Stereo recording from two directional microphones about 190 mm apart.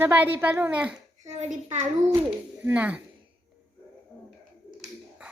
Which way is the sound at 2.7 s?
10° right (ahead or behind).